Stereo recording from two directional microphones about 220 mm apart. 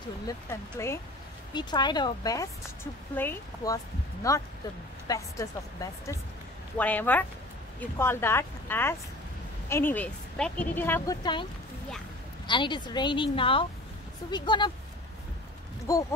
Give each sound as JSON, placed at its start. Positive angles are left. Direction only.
{"t": 0.3, "sound": "a woman's voice", "side_deg": 10}
{"t": 12.4, "sound": "a woman's voice", "side_deg": 20}
{"t": 15.9, "sound": "a woman's voice", "side_deg": 15}